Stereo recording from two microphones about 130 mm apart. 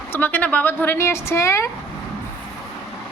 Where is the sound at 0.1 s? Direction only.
15° left (ahead or behind).